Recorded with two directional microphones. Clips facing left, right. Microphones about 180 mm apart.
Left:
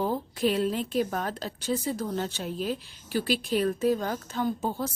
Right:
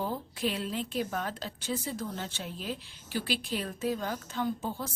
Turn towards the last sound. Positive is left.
turn(degrees=40)  # may be behind; listen again after turning